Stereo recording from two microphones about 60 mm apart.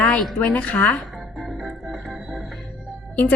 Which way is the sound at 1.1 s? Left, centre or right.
Centre.